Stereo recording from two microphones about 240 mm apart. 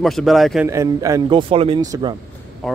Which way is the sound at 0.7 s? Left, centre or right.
Centre.